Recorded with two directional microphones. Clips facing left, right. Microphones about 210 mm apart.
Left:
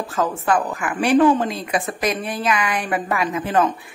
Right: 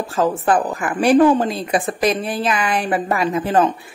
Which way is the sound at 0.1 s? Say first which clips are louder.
Right 3 dB; 30° right (ahead or behind).